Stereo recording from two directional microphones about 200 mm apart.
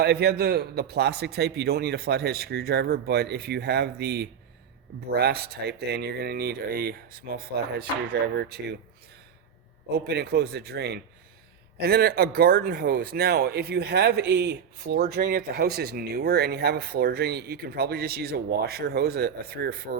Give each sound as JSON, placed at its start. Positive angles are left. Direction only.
{"t": 0.0, "sound": "speech", "side_deg": -55}
{"t": 10.1, "sound": "speech", "side_deg": -55}